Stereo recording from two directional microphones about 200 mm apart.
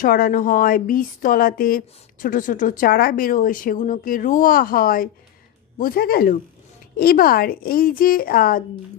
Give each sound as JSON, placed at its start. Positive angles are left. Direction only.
{"t": 0.0, "sound": "speech", "side_deg": 45}